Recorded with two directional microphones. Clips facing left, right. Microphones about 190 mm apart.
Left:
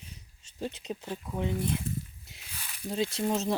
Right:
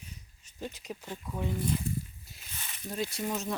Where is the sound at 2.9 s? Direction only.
25° left (ahead or behind).